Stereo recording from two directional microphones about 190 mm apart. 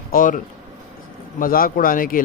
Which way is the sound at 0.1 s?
45° left (ahead or behind).